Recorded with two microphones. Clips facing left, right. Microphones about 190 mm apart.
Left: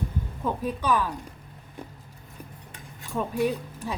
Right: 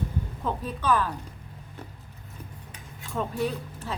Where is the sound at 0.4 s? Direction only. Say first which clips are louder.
Left 1 dB; 10° left (ahead or behind).